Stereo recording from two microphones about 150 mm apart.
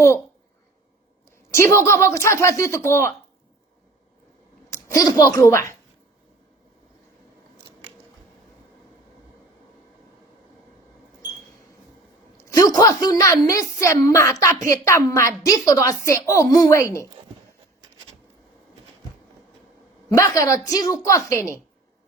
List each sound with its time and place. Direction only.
1.5 s a woman's voice: 20° left (ahead or behind)
4.7 s speech: 25° left (ahead or behind)
12.4 s a woman's voice: 20° left (ahead or behind)
20.1 s a woman's voice: 20° left (ahead or behind)